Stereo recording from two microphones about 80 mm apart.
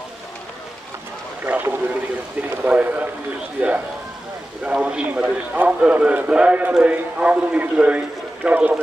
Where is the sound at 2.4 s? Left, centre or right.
Centre.